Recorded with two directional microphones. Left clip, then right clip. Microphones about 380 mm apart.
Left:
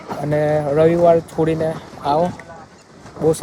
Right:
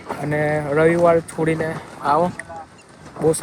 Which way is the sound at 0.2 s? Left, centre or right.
Centre.